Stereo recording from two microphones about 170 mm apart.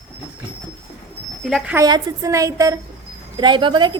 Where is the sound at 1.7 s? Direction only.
20° right (ahead or behind).